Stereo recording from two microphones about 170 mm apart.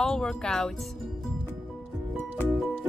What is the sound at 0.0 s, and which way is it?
Speech, 5° left (ahead or behind).